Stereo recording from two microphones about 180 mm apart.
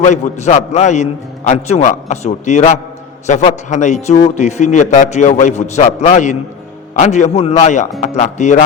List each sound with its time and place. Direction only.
0.0 s a man's voice: 40° left (ahead or behind)